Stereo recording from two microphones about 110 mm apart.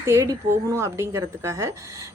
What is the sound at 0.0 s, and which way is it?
A woman's voice, 25° right (ahead or behind).